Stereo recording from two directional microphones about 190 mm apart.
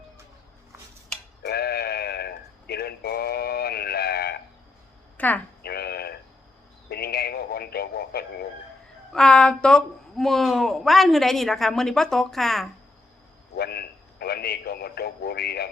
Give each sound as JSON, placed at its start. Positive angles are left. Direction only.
{"t": 1.4, "sound": "sheep", "side_deg": 55}
{"t": 5.1, "sound": "speech", "side_deg": 10}
{"t": 5.6, "sound": "a sound", "side_deg": 55}
{"t": 6.8, "sound": "radio", "side_deg": 55}
{"t": 9.1, "sound": "a woman's voice", "side_deg": 5}
{"t": 13.6, "sound": "radio", "side_deg": 55}